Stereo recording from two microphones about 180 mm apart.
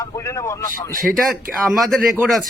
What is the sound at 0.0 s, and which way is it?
Speech, 15° left (ahead or behind).